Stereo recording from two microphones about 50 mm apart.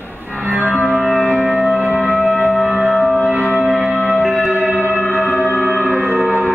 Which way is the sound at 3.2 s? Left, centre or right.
Left.